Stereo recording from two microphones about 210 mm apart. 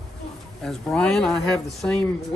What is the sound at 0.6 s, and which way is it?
Speech, 5° left (ahead or behind).